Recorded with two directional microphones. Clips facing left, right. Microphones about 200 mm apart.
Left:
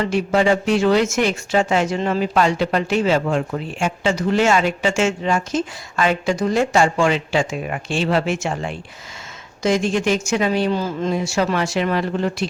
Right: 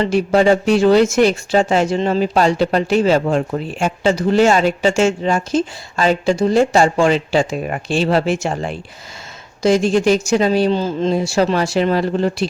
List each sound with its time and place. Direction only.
0.0 s speech: 35° right (ahead or behind)